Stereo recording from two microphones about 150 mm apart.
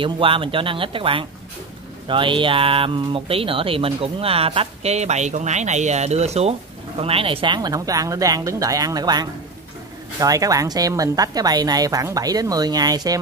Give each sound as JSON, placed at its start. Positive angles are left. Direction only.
{"t": 0.0, "sound": "speech", "side_deg": -35}